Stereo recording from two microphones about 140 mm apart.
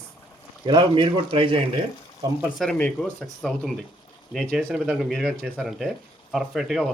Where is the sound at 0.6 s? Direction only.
35° right (ahead or behind).